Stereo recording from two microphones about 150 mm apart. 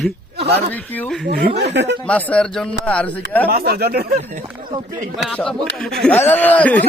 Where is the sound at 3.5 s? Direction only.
90° right.